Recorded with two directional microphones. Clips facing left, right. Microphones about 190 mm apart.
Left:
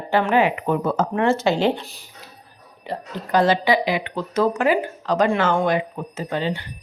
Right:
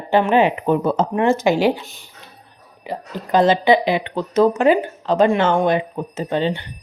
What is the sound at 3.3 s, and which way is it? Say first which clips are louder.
Speech: right 4 dB; 20° right (ahead or behind).